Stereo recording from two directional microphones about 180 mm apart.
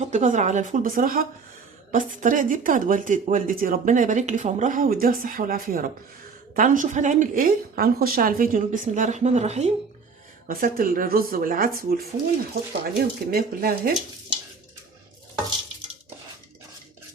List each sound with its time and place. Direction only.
0.0 s speech: 40° right (ahead or behind)
10.5 s speech: 50° right (ahead or behind)